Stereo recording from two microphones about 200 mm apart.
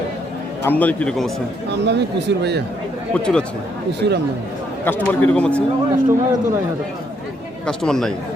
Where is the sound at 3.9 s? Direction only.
55° right (ahead or behind).